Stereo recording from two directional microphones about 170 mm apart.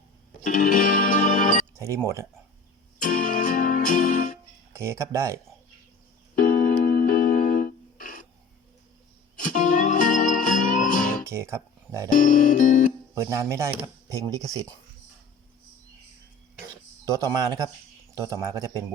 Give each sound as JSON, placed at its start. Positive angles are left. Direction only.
{"t": 0.4, "sound": "music", "side_deg": 55}
{"t": 1.7, "sound": "speech", "side_deg": -15}
{"t": 3.0, "sound": "music", "side_deg": 50}
{"t": 4.7, "sound": "speech", "side_deg": -15}
{"t": 6.3, "sound": "music", "side_deg": 50}
{"t": 9.4, "sound": "music", "side_deg": 50}
{"t": 11.3, "sound": "speech", "side_deg": -15}
{"t": 12.1, "sound": "music", "side_deg": 50}
{"t": 13.1, "sound": "speech", "side_deg": -15}
{"t": 17.1, "sound": "speech", "side_deg": -20}